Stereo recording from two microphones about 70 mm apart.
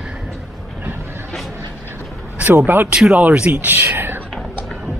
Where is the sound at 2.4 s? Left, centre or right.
Right.